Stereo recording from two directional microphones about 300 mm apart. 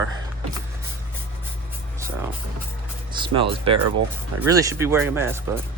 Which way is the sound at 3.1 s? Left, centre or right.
Centre.